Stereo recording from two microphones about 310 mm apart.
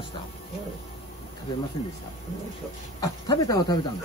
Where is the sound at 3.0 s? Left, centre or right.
Centre.